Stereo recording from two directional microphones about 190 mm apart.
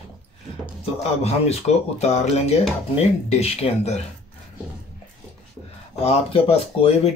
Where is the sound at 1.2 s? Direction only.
35° left (ahead or behind).